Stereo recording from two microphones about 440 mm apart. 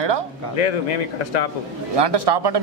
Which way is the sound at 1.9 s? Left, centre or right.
Right.